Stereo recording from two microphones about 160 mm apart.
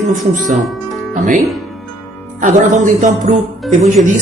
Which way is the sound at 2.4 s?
50° right (ahead or behind).